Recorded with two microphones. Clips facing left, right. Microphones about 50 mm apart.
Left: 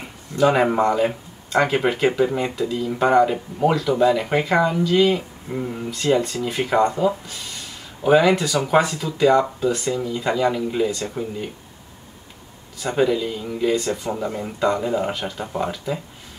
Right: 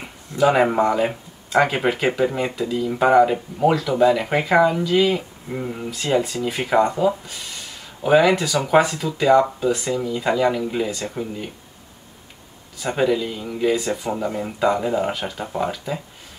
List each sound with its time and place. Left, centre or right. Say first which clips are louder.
0.0 s speech: even; centre
12.7 s speech: even; centre